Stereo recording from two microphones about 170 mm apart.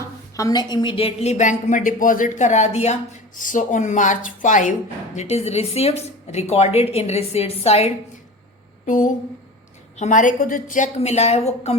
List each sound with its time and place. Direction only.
0.0 s a woman's voice: 20° left (ahead or behind); by 7.9 s 35° left (ahead or behind)
8.9 s a woman's voice: 50° left (ahead or behind)